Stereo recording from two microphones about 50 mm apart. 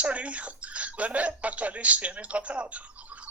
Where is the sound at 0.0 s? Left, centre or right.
Right.